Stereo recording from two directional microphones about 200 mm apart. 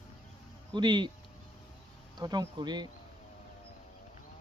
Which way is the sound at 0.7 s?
20° right (ahead or behind).